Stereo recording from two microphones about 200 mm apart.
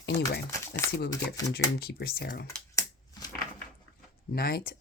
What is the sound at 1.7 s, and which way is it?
Speech, 50° left (ahead or behind).